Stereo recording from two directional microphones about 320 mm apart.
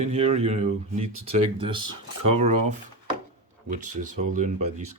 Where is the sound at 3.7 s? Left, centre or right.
Right.